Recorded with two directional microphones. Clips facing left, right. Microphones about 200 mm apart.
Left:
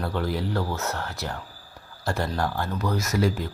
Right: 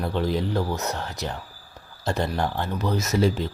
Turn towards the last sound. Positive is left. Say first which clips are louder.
# right 2 dB
turn(degrees=-25)  # may be behind; listen again after turning